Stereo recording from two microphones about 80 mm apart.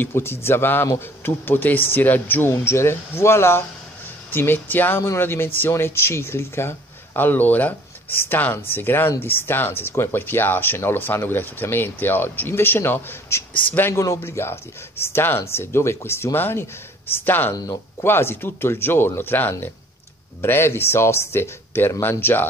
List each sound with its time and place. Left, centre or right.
0.0 s speech: left
2.5 s speech: left
13.9 s speech: left